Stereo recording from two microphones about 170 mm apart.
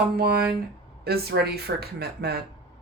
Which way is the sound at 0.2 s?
65° right (ahead or behind).